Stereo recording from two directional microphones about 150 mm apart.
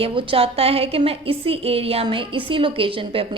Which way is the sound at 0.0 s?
35° right (ahead or behind).